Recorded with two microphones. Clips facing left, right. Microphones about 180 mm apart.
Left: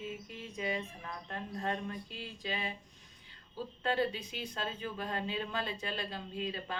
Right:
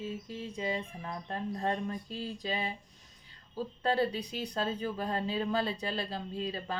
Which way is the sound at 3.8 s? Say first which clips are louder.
Right 3 dB; 35° right (ahead or behind).